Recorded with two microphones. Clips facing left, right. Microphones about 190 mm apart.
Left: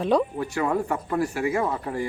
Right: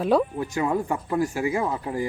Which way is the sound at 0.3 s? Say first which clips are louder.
Even; 20° right (ahead or behind).